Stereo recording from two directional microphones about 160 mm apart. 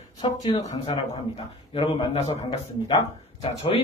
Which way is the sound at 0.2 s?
30° left (ahead or behind).